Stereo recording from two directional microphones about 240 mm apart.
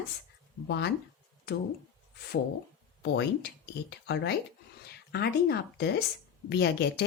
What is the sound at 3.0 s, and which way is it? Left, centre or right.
Speech, left.